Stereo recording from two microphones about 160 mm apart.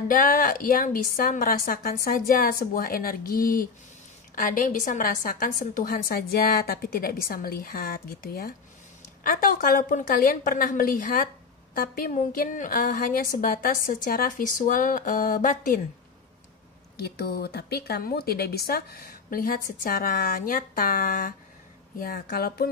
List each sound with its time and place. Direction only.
0.1 s a woman's voice: 60° left (ahead or behind)
17.0 s speech: 80° left